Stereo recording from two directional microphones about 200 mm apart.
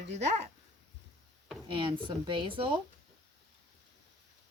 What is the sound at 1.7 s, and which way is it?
Speech, 25° right (ahead or behind).